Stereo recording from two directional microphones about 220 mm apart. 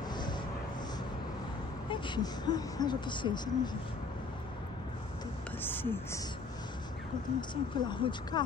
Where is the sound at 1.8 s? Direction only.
20° left (ahead or behind).